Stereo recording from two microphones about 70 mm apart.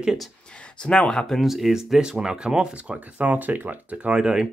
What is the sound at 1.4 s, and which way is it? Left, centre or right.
Speech, centre.